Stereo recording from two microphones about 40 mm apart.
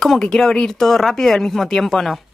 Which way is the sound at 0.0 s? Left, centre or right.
Centre.